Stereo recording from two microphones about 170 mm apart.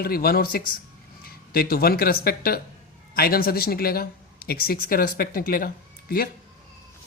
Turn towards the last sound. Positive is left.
turn(degrees=60)  # may be behind; listen again after turning